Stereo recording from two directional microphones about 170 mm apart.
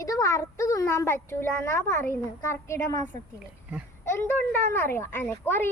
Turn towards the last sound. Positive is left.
turn(degrees=15)  # may be behind; listen again after turning